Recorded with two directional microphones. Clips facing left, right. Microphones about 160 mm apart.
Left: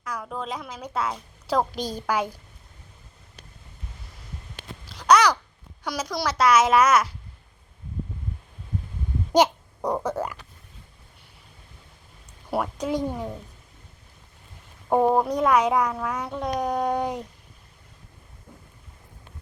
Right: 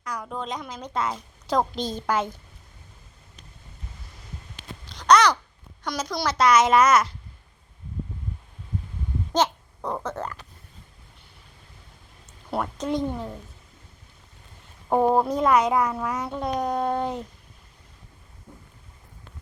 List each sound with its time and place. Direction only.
0.0 s a woman's voice: 5° left (ahead or behind)
4.9 s a sound: 5° left (ahead or behind)
5.8 s a child's voice: 5° left (ahead or behind)
9.3 s speech: 15° left (ahead or behind)
12.5 s a child's voice: 5° left (ahead or behind)
14.8 s a woman's voice: centre (ahead or behind)
16.5 s a child's voice: 10° left (ahead or behind)